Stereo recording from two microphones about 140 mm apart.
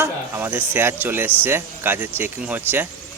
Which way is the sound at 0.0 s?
15° right (ahead or behind).